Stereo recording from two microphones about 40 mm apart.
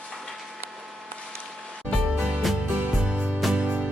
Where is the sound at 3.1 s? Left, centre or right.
Right.